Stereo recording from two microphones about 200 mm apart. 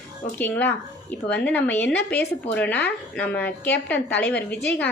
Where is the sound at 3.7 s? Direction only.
60° left (ahead or behind).